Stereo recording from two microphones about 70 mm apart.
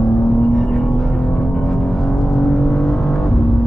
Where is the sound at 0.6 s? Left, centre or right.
Centre.